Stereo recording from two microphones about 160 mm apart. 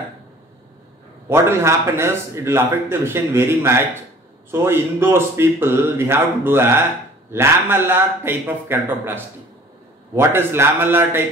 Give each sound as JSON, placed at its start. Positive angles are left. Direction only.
{"t": 1.3, "sound": "speech", "side_deg": -15}